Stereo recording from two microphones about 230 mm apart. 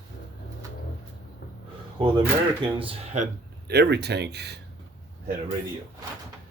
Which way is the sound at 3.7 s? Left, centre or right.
Right.